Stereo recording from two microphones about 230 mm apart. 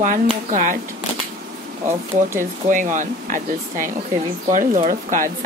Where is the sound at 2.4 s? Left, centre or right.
Right.